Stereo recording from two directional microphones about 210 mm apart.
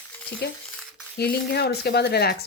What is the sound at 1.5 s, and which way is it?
Speech, 50° left (ahead or behind).